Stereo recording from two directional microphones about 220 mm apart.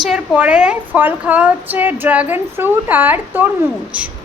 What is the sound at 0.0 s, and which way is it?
A woman's voice, 5° right (ahead or behind).